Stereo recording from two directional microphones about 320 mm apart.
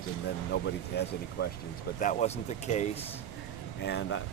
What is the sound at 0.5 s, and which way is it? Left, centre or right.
Speech, left.